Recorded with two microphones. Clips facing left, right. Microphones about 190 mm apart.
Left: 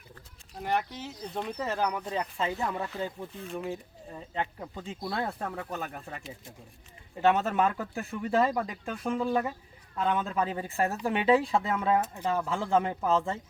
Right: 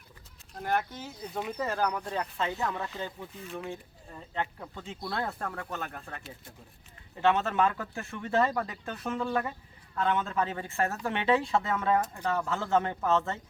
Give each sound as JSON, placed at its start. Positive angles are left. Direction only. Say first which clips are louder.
{"t": 0.5, "sound": "speech", "louder": "even", "side_deg": 0}
{"t": 2.6, "sound": "speech", "louder": "left 1 dB", "side_deg": 15}
{"t": 3.4, "sound": "speech", "louder": "left 3 dB", "side_deg": 0}
{"t": 12.5, "sound": "speech", "louder": "left 1 dB", "side_deg": 0}